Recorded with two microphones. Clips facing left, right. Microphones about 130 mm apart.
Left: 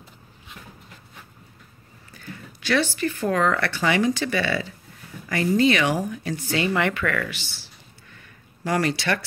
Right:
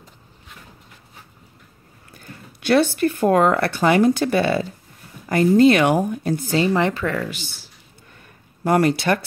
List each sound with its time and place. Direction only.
2.0 s speech: 50° right (ahead or behind); by 7.2 s 30° right (ahead or behind)
8.6 s speech: 50° right (ahead or behind)